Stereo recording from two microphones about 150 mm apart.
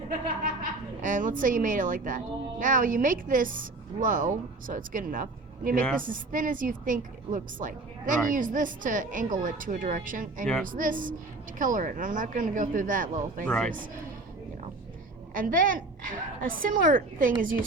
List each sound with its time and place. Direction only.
1.0 s a woman's voice: 60° right (ahead or behind)
10.4 s speech: 5° left (ahead or behind)
10.7 s a woman's voice: 65° right (ahead or behind)
13.4 s speech: 10° left (ahead or behind)
15.3 s a woman's voice: 65° right (ahead or behind)